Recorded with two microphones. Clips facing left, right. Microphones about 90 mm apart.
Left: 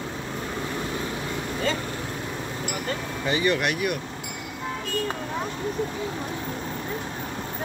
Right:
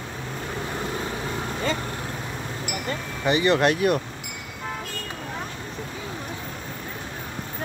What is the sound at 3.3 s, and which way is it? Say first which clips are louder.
Speech: right 4 dB; 25° right (ahead or behind).